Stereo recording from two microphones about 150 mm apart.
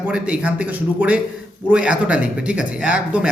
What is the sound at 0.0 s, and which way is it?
A man's voice, 10° right (ahead or behind).